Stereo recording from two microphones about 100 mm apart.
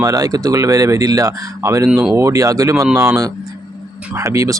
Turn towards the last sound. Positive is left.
turn(degrees=-30)  # may be behind; listen again after turning